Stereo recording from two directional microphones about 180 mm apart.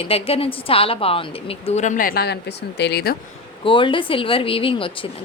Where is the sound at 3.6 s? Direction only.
30° left (ahead or behind).